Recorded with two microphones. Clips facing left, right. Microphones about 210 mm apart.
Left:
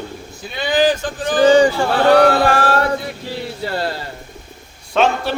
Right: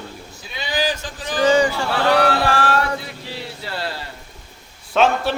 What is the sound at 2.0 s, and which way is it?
Speech, 45° left (ahead or behind).